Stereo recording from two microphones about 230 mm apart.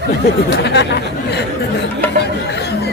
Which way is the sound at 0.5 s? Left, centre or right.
Left.